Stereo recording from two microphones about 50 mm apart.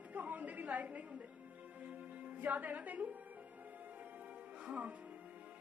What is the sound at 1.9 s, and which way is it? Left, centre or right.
Music, right.